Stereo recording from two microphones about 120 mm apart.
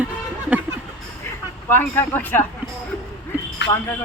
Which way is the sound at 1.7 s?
15° left (ahead or behind).